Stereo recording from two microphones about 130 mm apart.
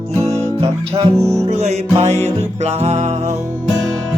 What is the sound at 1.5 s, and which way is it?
Music, 55° right (ahead or behind).